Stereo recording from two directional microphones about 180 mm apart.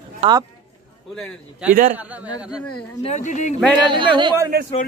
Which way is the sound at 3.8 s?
25° right (ahead or behind).